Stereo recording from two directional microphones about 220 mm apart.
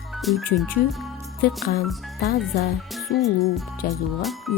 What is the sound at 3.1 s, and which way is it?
Speech, 45° left (ahead or behind).